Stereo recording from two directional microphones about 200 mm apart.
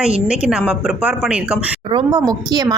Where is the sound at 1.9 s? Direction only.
20° right (ahead or behind).